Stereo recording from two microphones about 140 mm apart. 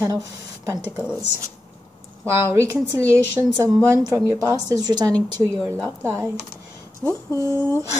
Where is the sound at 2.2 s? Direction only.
20° right (ahead or behind).